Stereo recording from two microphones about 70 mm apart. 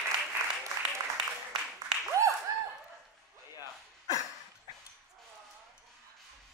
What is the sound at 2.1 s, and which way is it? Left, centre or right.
Applause, right.